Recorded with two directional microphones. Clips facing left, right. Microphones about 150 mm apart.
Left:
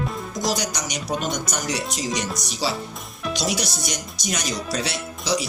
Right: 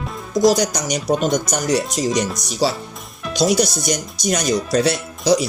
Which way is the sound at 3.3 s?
40° right (ahead or behind).